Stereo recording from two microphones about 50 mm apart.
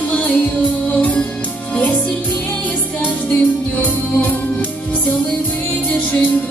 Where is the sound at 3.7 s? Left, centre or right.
Left.